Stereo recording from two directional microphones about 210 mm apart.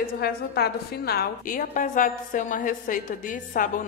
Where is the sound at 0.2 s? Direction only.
50° left (ahead or behind).